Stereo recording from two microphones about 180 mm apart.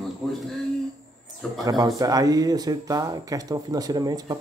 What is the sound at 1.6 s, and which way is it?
Speech, 20° right (ahead or behind).